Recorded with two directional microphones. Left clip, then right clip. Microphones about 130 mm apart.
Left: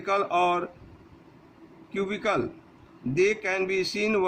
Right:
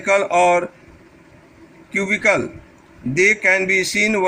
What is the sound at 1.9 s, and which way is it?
A man's voice, 25° right (ahead or behind).